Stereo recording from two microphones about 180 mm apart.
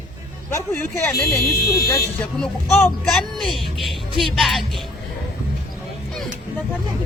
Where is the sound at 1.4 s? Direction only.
60° left (ahead or behind).